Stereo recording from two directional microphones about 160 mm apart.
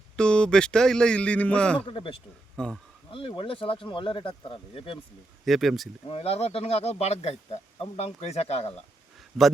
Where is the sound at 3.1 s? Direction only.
35° left (ahead or behind).